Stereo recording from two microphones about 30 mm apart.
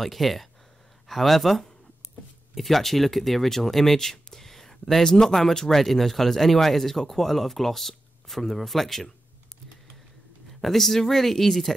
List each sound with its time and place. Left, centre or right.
0.0 s speech: centre
10.6 s speech: centre